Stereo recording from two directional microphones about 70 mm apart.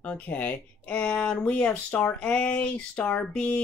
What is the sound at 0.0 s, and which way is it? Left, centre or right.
Speech, left.